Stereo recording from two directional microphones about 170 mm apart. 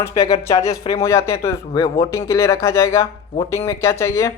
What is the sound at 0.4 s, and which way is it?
Speech, 20° left (ahead or behind).